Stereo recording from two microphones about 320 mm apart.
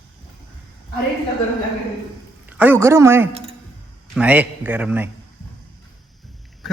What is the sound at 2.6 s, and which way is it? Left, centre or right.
A man's voice, centre.